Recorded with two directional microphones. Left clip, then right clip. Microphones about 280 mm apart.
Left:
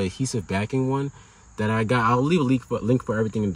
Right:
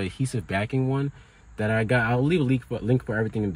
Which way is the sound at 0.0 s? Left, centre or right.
Centre.